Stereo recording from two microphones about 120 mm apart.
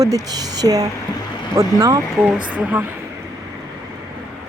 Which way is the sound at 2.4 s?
10° right (ahead or behind).